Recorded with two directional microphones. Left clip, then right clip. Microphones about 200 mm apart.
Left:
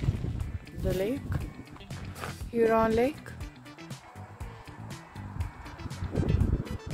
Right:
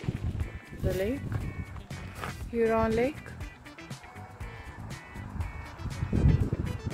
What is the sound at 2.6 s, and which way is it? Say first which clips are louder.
Speech: left 2 dB; 20° left (ahead or behind).